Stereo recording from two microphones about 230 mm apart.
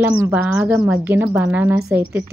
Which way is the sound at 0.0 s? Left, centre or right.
Centre.